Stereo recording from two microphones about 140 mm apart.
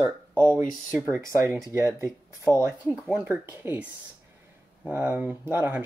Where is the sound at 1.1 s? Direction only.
20° right (ahead or behind).